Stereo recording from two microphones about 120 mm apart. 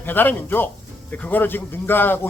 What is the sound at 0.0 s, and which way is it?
Speech, 15° left (ahead or behind).